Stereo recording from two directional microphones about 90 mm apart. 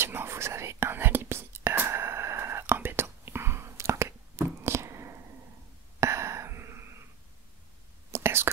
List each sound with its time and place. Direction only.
0.0 s whispering: 25° right (ahead or behind)
5.9 s a sound: 35° right (ahead or behind)
8.1 s whispering: 30° right (ahead or behind)